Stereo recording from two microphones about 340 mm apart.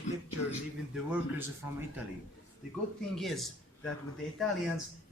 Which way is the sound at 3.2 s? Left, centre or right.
Centre.